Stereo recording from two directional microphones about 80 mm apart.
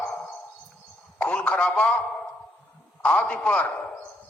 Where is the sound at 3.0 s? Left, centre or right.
Centre.